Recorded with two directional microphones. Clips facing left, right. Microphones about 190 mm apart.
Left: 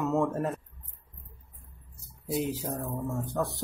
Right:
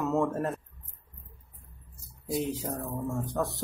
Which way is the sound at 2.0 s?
Centre (ahead or behind).